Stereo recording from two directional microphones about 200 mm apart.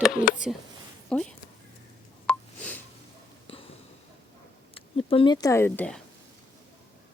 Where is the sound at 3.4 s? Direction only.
30° left (ahead or behind).